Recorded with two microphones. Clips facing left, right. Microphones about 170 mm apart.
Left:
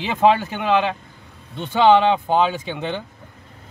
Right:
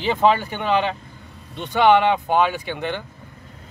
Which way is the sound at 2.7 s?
20° left (ahead or behind).